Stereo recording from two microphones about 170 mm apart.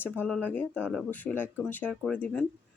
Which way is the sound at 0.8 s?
5° right (ahead or behind).